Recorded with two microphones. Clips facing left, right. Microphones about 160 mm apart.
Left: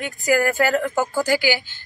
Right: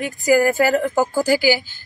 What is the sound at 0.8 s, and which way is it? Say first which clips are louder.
Speech: right 3 dB; 40° right (ahead or behind).